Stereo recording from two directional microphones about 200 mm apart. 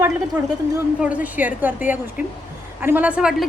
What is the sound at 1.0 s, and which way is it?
A woman's voice, 5° right (ahead or behind).